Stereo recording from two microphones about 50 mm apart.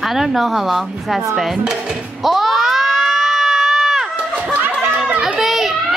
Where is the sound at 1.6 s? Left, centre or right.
Centre.